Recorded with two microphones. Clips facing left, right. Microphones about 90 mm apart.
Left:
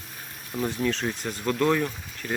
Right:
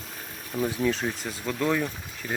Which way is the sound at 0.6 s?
5° right (ahead or behind).